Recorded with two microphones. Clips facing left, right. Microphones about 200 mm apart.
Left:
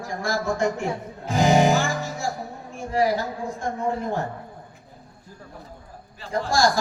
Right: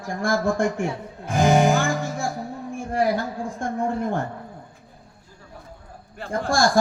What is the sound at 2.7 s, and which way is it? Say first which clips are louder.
Speech: even; 55° right (ahead or behind).